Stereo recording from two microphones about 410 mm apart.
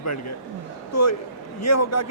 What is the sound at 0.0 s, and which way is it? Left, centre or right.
A man's voice, left.